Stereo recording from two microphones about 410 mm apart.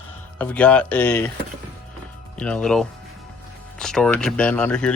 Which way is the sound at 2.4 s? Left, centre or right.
Centre.